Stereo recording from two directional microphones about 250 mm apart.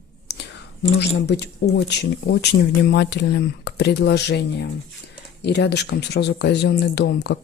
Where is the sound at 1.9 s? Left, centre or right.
Left.